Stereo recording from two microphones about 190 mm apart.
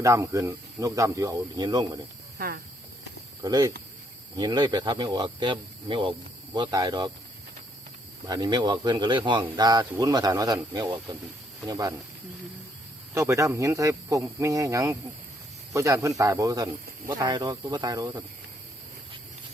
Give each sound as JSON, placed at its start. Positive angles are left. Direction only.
{"t": 0.0, "sound": "speech", "side_deg": -15}
{"t": 3.4, "sound": "speech", "side_deg": -20}
{"t": 8.3, "sound": "speech", "side_deg": -20}
{"t": 13.1, "sound": "speech", "side_deg": -15}